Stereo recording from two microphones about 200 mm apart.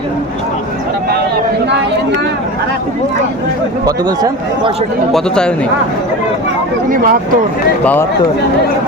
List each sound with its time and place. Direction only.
3.8 s speech: 20° right (ahead or behind)
5.1 s a man's voice: 5° left (ahead or behind)
6.9 s speech: 45° right (ahead or behind)